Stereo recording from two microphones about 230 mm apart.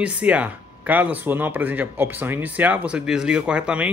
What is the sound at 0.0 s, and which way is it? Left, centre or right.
Speech, centre.